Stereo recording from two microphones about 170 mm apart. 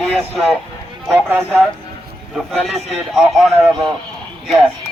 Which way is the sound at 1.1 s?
10° right (ahead or behind).